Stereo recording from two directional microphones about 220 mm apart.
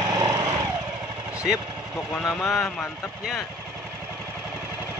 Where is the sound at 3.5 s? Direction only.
10° right (ahead or behind).